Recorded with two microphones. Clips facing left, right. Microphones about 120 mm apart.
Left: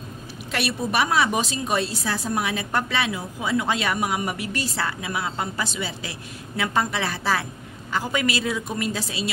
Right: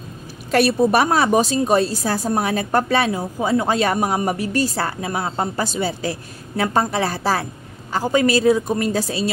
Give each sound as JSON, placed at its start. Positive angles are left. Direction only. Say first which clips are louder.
{"t": 0.5, "sound": "a woman's voice", "louder": "right 10 dB", "side_deg": -40}